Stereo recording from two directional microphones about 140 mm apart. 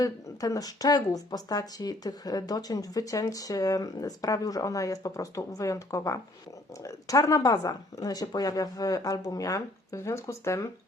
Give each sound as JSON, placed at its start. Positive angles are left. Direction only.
{"t": 0.0, "sound": "speech", "side_deg": 25}